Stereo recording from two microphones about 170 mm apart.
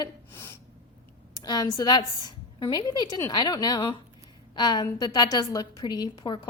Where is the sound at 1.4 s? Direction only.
25° left (ahead or behind).